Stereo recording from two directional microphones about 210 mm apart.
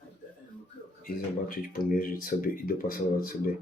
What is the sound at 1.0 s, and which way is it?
Speech, 45° left (ahead or behind).